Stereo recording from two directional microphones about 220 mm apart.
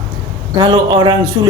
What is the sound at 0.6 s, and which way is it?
Speech, 20° right (ahead or behind).